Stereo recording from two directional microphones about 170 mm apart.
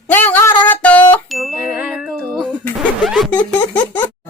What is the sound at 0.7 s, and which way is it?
Ding, 10° left (ahead or behind).